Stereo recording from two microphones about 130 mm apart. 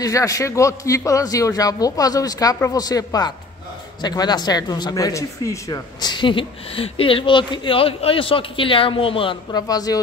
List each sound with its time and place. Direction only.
0.0 s a man's voice: 25° left (ahead or behind)